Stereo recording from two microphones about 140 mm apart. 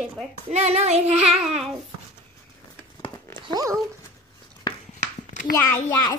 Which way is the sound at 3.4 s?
30° right (ahead or behind).